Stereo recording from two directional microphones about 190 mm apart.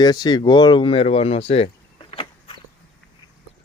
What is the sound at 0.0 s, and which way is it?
Speech, 20° left (ahead or behind).